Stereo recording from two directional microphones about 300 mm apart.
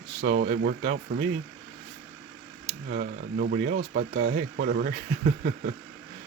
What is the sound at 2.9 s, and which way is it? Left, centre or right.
Speech, right.